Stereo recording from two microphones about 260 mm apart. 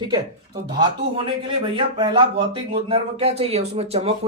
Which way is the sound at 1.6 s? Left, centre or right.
Centre.